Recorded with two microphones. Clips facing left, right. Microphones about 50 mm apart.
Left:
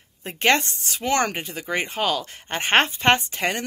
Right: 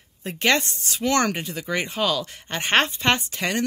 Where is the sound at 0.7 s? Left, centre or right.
Centre.